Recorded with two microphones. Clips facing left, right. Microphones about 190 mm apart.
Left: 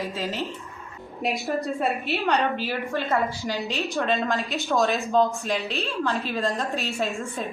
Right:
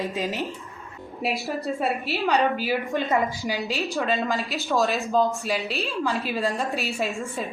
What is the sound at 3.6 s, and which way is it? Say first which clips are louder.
A woman's voice: left 1 dB; centre (ahead or behind).